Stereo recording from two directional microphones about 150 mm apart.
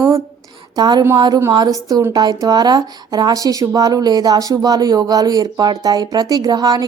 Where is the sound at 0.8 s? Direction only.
30° right (ahead or behind).